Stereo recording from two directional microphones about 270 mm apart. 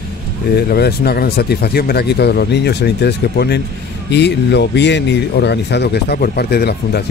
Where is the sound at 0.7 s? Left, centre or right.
Left.